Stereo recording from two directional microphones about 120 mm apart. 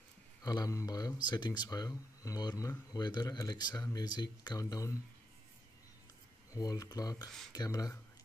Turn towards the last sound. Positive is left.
turn(degrees=30)  # may be behind; listen again after turning